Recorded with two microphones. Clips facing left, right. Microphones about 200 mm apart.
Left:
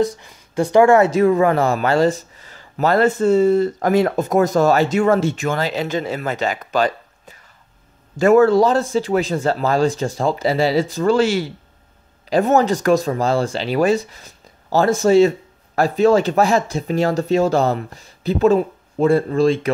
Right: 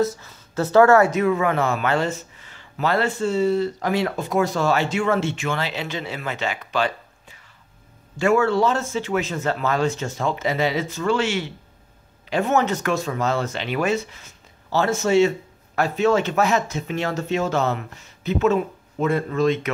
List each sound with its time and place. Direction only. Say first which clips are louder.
0.2 s speech: left 4 dB; 15° left (ahead or behind)
1.1 s speech: left 6 dB; 35° left (ahead or behind)